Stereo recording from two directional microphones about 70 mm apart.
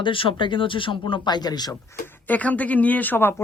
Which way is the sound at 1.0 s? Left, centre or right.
Left.